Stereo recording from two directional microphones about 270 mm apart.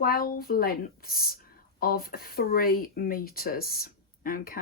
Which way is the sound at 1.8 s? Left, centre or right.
Left.